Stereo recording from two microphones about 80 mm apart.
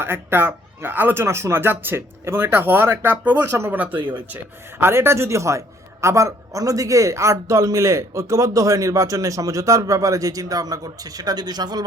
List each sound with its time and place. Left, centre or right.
0.0 s a man's voice: right